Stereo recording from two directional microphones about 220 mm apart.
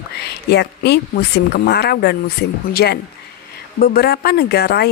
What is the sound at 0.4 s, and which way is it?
A woman's voice, 50° left (ahead or behind).